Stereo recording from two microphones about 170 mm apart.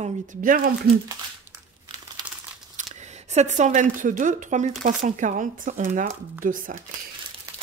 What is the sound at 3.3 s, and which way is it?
A woman's voice, 45° right (ahead or behind).